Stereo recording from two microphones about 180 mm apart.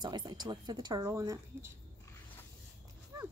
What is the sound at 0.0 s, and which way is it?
Speech, 25° right (ahead or behind).